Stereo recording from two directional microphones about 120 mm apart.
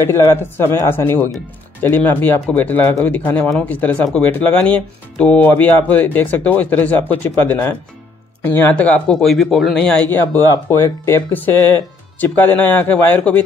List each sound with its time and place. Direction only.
0.0 s speech: 20° left (ahead or behind)